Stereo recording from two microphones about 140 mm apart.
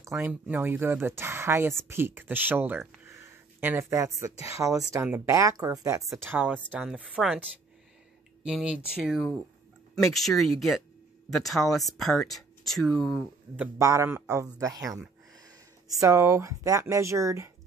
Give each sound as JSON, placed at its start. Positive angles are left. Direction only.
{"t": 0.0, "sound": "speech", "side_deg": -15}
{"t": 6.2, "sound": "speech", "side_deg": -10}
{"t": 8.5, "sound": "speech", "side_deg": -5}
{"t": 13.7, "sound": "speech", "side_deg": -20}